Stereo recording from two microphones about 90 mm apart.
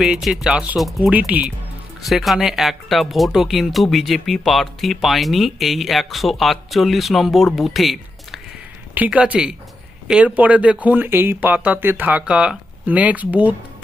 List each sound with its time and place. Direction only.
0.0 s speech: 5° right (ahead or behind)
0.8 s speech: centre (ahead or behind)
1.3 s speech: 15° right (ahead or behind)
2.0 s speech: centre (ahead or behind)
9.0 s speech: 15° right (ahead or behind)